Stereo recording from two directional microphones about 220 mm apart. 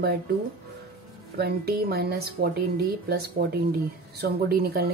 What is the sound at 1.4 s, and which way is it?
Speech, 45° right (ahead or behind).